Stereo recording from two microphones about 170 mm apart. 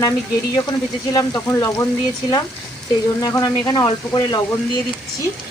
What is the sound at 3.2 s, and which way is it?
Stir, 20° left (ahead or behind).